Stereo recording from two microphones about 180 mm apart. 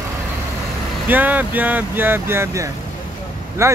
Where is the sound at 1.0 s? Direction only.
10° right (ahead or behind).